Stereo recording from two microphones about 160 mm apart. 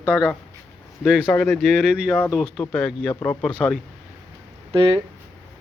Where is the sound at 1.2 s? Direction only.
10° left (ahead or behind).